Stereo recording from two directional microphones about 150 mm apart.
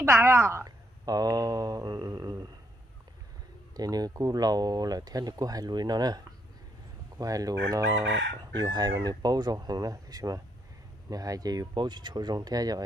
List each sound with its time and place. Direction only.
0.0 s speech: 15° right (ahead or behind)
3.7 s speech: 25° right (ahead or behind)